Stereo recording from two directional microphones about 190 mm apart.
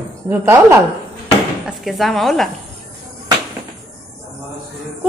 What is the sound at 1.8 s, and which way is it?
Speech, centre (ahead or behind).